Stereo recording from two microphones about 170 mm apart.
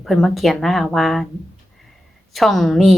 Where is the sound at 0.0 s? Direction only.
Centre (ahead or behind).